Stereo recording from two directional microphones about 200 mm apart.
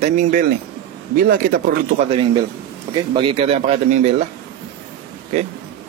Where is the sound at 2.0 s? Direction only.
30° right (ahead or behind).